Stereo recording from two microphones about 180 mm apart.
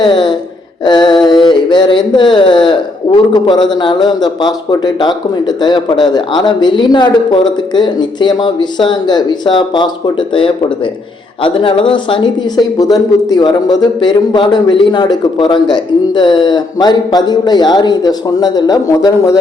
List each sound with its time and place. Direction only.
0.0 s speech: 25° left (ahead or behind)
0.9 s a sound: 25° left (ahead or behind)
3.3 s speech: 25° left (ahead or behind)